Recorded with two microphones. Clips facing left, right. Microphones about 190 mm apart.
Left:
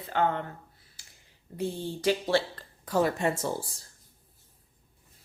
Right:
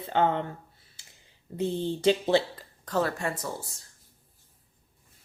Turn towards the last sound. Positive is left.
turn(degrees=30)  # may be behind; listen again after turning